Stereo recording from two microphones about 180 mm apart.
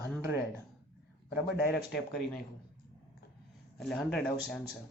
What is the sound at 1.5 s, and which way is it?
Speech, 60° left (ahead or behind).